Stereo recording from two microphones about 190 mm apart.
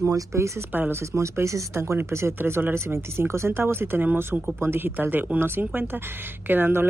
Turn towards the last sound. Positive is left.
turn(degrees=-10)  # may be behind; listen again after turning